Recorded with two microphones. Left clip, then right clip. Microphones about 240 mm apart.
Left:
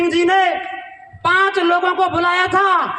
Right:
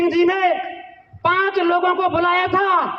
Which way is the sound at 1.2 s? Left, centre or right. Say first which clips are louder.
Left 3 dB; left.